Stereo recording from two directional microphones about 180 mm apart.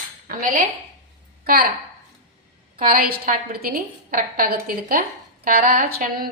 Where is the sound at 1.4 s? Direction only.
55° right (ahead or behind).